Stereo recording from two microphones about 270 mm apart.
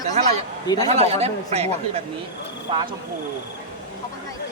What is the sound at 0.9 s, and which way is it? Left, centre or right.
A man's voice, right.